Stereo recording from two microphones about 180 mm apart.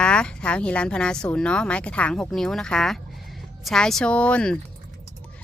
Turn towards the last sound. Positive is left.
turn(degrees=5)  # may be behind; listen again after turning